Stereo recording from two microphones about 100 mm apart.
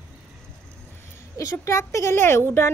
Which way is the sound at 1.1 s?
30° left (ahead or behind).